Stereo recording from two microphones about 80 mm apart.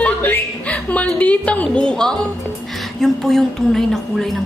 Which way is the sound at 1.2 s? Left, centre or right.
Centre.